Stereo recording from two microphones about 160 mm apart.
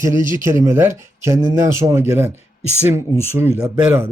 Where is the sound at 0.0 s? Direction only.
20° right (ahead or behind).